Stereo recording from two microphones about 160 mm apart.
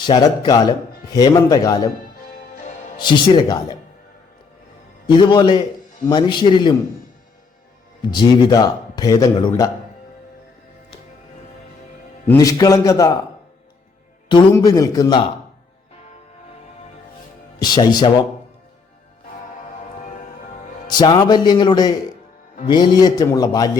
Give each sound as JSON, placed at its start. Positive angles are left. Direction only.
{"t": 0.0, "sound": "speech", "side_deg": 25}
{"t": 3.0, "sound": "speech", "side_deg": 30}
{"t": 5.0, "sound": "speech", "side_deg": 30}
{"t": 8.1, "sound": "speech", "side_deg": 25}
{"t": 12.4, "sound": "speech", "side_deg": 20}
{"t": 14.5, "sound": "speech", "side_deg": 20}
{"t": 17.6, "sound": "speech", "side_deg": 25}
{"t": 20.8, "sound": "speech", "side_deg": 25}